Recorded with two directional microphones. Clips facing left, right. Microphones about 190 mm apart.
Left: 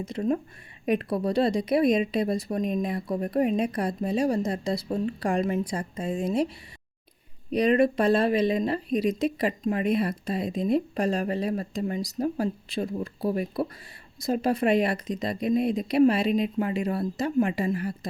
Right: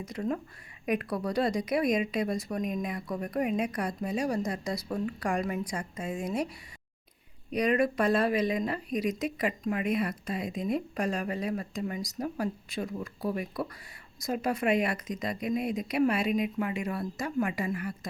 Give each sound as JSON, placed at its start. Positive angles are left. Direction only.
{"t": 0.0, "sound": "a woman's voice", "side_deg": 25}
{"t": 7.5, "sound": "speech", "side_deg": 30}